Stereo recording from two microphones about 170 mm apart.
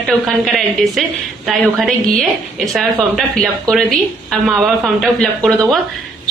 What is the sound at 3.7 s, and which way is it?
A woman's voice, centre (ahead or behind).